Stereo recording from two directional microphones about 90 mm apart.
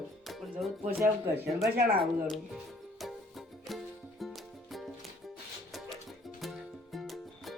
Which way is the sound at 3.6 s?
Centre (ahead or behind).